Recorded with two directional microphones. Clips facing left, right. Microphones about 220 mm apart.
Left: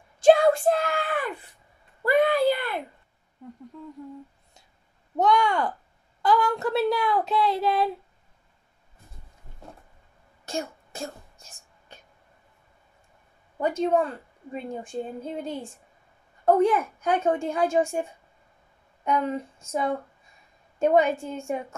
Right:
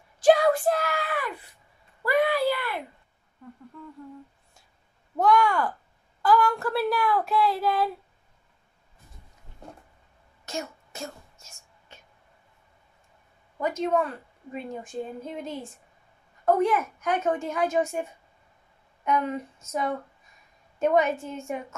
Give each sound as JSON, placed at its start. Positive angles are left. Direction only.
{"t": 0.2, "sound": "a sound", "side_deg": 25}
{"t": 5.1, "sound": "a woman's voice", "side_deg": 20}
{"t": 10.4, "sound": "whispering", "side_deg": 30}
{"t": 13.6, "sound": "a woman's voice", "side_deg": 30}
{"t": 19.0, "sound": "a woman's voice", "side_deg": 30}